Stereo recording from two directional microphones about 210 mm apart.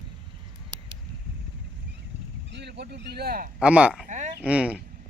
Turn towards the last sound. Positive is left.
turn(degrees=-5)  # may be behind; listen again after turning